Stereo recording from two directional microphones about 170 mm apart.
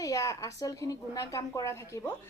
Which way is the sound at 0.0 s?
20° left (ahead or behind).